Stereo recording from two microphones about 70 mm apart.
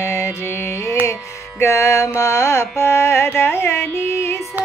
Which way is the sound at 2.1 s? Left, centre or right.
Left.